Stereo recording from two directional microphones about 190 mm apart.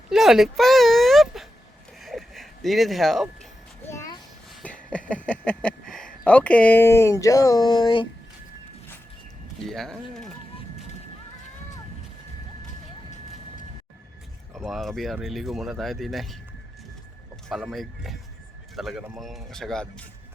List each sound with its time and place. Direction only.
0.1 s speech: centre (ahead or behind)
2.0 s a sound: centre (ahead or behind)
3.8 s a sound: 15° left (ahead or behind)
4.6 s speech: 5° left (ahead or behind); by 8.0 s 25° left (ahead or behind)
9.6 s speech: centre (ahead or behind)
14.5 s speech: centre (ahead or behind)
17.5 s speech: centre (ahead or behind)